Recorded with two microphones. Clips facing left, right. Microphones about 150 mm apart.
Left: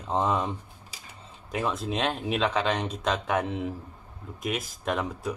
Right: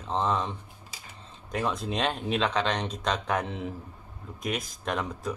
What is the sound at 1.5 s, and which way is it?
Speech, centre (ahead or behind).